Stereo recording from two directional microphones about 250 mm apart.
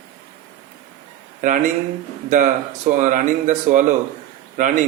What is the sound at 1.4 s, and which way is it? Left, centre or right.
Speech, right.